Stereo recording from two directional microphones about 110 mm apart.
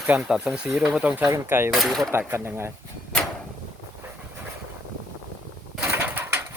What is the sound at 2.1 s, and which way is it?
Speech, 20° right (ahead or behind).